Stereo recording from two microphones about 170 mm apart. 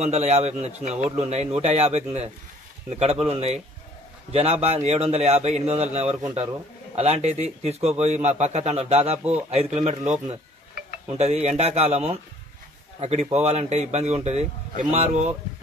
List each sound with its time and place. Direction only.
0.0 s a man's voice: 40° right (ahead or behind)
7.0 s a man's voice: 40° right (ahead or behind)